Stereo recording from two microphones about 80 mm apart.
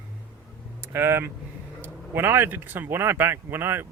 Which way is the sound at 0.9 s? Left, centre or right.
Right.